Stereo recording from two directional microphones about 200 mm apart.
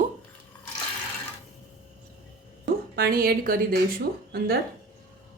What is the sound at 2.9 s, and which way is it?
Speech, 50° right (ahead or behind).